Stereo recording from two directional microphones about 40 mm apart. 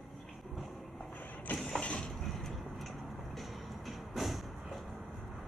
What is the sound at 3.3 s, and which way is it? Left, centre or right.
Music, centre.